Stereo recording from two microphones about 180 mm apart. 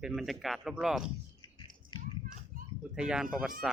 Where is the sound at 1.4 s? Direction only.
25° left (ahead or behind).